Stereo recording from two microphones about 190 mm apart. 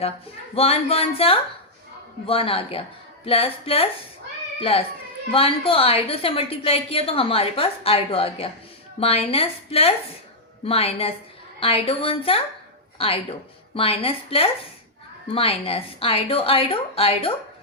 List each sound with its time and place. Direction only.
0.5 s a woman's voice: 30° left (ahead or behind)
5.3 s a woman's voice: 30° left (ahead or behind)
13.7 s a woman's voice: 30° left (ahead or behind)